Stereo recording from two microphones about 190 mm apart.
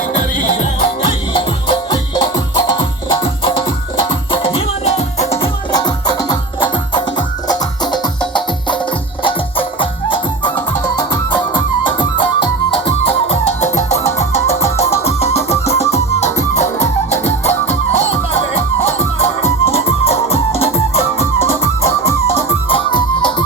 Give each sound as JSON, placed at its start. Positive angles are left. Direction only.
{"t": 0.1, "sound": "music", "side_deg": 40}
{"t": 1.0, "sound": "music", "side_deg": 25}
{"t": 5.7, "sound": "music", "side_deg": 20}